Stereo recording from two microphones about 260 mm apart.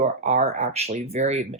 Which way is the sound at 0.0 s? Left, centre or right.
Right.